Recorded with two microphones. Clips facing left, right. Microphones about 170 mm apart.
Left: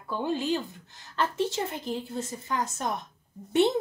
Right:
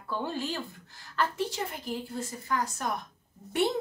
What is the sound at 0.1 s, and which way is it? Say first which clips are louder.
A woman's voice: left 5 dB; 15° left (ahead or behind).